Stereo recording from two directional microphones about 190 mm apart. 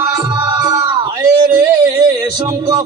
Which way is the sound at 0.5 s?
20° right (ahead or behind).